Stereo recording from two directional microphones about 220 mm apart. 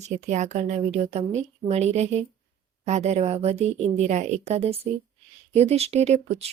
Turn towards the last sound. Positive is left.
turn(degrees=-30)  # may be behind; listen again after turning